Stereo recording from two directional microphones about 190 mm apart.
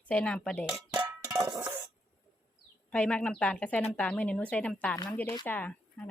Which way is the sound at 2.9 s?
5° left (ahead or behind).